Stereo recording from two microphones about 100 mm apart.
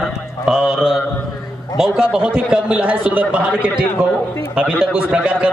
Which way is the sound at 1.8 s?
5° right (ahead or behind).